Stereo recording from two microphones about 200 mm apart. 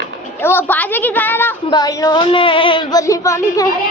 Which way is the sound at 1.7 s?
20° left (ahead or behind).